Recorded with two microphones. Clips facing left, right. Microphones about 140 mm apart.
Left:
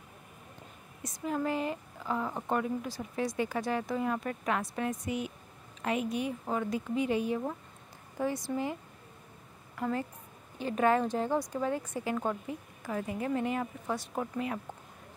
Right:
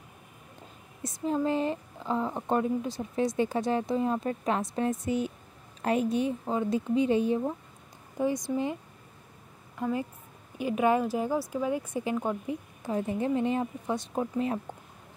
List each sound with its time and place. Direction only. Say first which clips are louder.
1.0 s a woman's voice: right 4 dB; 30° right (ahead or behind)
8.2 s speech: right 4 dB; 15° right (ahead or behind)
9.8 s a woman's voice: right 2 dB; 15° right (ahead or behind)